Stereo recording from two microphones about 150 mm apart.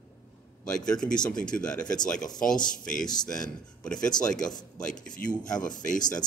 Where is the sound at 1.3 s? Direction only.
5° left (ahead or behind).